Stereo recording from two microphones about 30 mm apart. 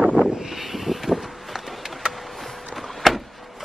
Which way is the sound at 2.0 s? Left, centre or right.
Right.